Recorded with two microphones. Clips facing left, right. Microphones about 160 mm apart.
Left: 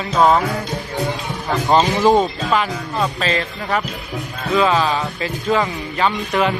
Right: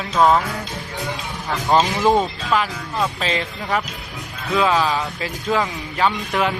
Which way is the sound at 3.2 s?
15° right (ahead or behind).